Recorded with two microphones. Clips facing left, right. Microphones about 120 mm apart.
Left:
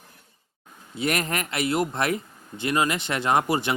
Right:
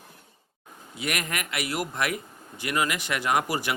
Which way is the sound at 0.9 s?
30° left (ahead or behind).